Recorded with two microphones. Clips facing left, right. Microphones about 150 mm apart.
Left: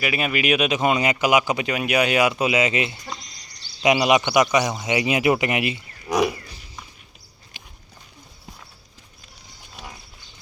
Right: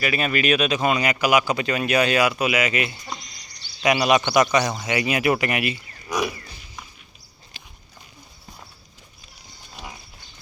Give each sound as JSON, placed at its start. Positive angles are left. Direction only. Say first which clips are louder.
{"t": 0.0, "sound": "speech", "louder": "right 1 dB", "side_deg": 15}
{"t": 7.6, "sound": "horse", "louder": "left 1 dB", "side_deg": 15}